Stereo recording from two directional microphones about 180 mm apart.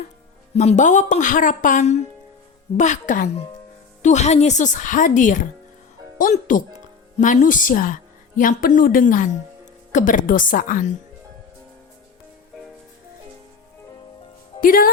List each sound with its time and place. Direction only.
0.5 s a woman's voice: 40° left (ahead or behind)
14.6 s speech: 50° left (ahead or behind)